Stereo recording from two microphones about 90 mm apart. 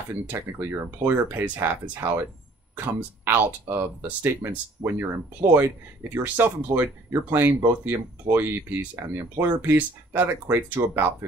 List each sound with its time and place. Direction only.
0.1 s speech: 25° right (ahead or behind)